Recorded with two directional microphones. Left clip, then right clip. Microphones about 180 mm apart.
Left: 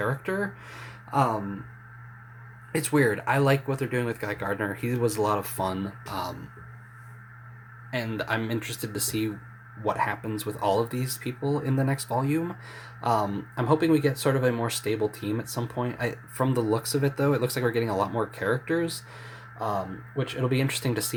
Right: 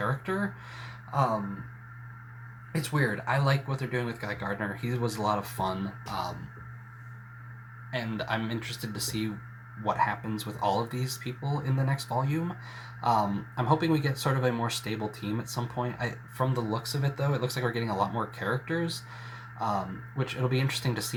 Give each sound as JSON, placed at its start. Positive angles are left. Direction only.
{"t": 0.0, "sound": "speech", "side_deg": 40}
{"t": 2.7, "sound": "speech", "side_deg": 50}
{"t": 7.9, "sound": "speech", "side_deg": 45}